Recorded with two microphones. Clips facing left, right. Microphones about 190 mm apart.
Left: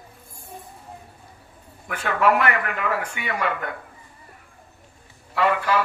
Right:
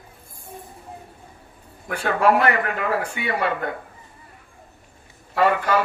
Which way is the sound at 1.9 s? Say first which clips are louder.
Right 2 dB; 35° right (ahead or behind).